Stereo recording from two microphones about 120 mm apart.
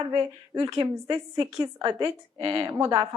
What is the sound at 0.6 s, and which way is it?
A woman's voice, 25° right (ahead or behind).